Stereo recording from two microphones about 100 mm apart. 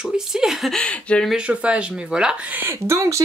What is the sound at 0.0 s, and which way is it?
Speech, 5° right (ahead or behind).